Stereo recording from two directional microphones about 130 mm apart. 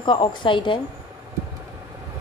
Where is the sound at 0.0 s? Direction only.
40° left (ahead or behind).